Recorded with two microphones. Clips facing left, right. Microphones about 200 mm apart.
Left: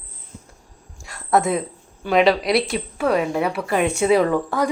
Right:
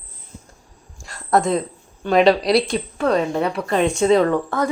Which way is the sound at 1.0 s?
5° left (ahead or behind).